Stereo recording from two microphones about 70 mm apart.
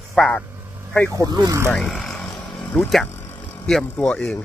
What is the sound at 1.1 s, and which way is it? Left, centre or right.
Speech, right.